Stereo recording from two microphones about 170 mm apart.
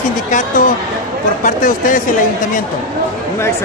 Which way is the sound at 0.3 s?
50° left (ahead or behind).